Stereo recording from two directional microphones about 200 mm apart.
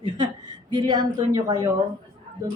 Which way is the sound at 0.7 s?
20° right (ahead or behind).